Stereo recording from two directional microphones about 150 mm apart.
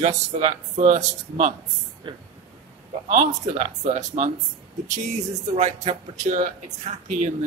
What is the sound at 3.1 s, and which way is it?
Speech, 55° right (ahead or behind).